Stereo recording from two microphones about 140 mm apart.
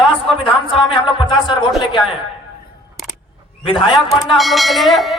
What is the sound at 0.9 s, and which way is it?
Speech, 35° left (ahead or behind).